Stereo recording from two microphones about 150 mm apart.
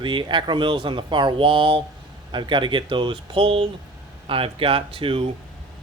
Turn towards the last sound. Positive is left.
turn(degrees=-35)  # may be behind; listen again after turning